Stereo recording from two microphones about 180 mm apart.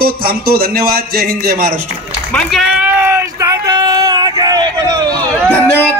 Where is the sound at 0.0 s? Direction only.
55° right (ahead or behind).